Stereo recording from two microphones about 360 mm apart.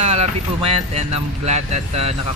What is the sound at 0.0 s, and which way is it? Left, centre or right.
Speech, centre.